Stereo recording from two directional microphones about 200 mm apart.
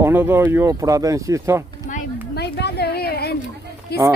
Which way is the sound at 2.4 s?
55° left (ahead or behind).